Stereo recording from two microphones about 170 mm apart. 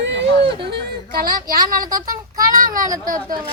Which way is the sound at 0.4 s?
75° right (ahead or behind).